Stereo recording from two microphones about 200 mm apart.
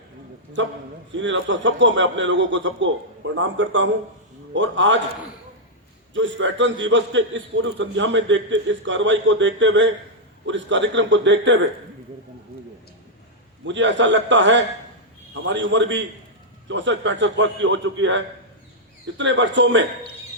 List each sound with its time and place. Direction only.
0.6 s a man's voice: 65° right (ahead or behind)
6.1 s a man's voice: 65° right (ahead or behind)
13.7 s a man's voice: 65° right (ahead or behind)